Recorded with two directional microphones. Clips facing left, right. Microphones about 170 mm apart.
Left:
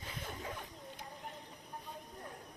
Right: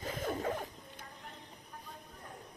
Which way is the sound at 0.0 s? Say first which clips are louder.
Right 9 dB; 45° right (ahead or behind).